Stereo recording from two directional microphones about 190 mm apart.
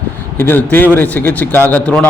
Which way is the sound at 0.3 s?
10° left (ahead or behind).